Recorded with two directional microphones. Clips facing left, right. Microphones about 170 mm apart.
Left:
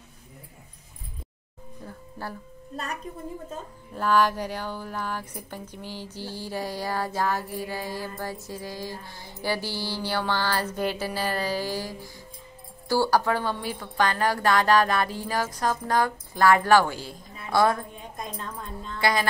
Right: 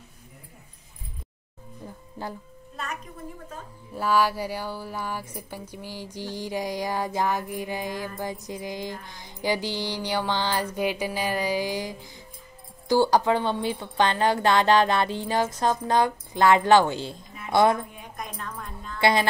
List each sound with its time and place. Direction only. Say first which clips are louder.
1.9 s music: right 1 dB; 15° right (ahead or behind)
2.7 s a woman's voice: left 1 dB; 35° left (ahead or behind)
3.9 s a woman's voice: left 1 dB; 10° right (ahead or behind)
18.1 s a woman's voice: even; 25° left (ahead or behind)
18.9 s a woman's voice: right 3 dB; 25° right (ahead or behind)